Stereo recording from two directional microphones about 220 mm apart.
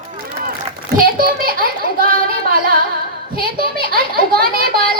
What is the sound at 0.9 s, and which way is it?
A child's voice, 40° right (ahead or behind).